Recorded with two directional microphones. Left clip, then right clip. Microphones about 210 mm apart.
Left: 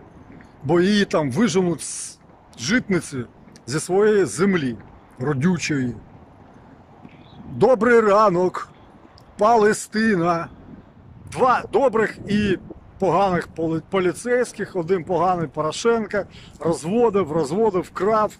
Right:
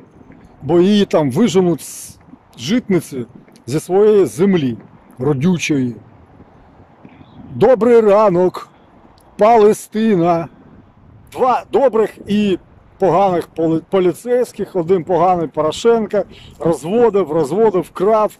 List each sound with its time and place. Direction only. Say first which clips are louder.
0.7 s speech: right 6 dB; 15° right (ahead or behind)
7.5 s speech: right 5 dB; 15° right (ahead or behind)